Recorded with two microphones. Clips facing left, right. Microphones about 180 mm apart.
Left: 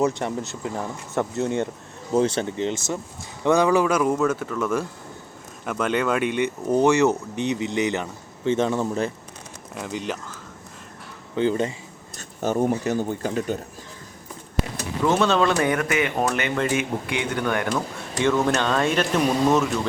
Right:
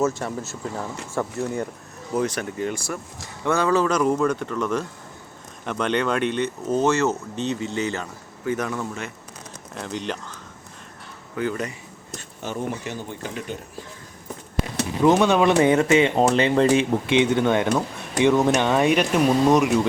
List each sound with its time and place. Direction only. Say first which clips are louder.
0.2 s speech: left 2 dB; 20° left (ahead or behind)
9.7 s speech: even; 5° left (ahead or behind)
11.3 s speech: left 4 dB; 25° left (ahead or behind)
12.4 s speech: left 7 dB; 45° left (ahead or behind)
15.0 s speech: right 3 dB; 15° right (ahead or behind)